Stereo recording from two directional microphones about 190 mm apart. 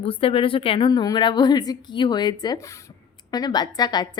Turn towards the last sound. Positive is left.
turn(degrees=20)  # may be behind; listen again after turning